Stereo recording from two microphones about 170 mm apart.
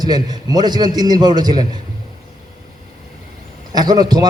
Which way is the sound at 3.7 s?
25° right (ahead or behind).